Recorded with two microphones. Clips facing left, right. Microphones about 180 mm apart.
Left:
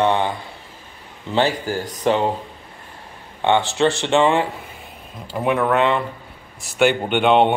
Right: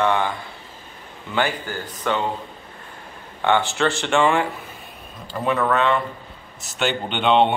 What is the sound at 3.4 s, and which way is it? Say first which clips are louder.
Speech: left 3 dB; 20° left (ahead or behind).